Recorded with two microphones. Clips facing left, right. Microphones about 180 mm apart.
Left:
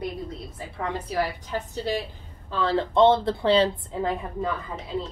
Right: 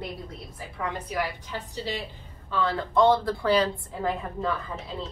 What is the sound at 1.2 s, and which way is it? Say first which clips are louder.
Speech: left 4 dB; 40° left (ahead or behind).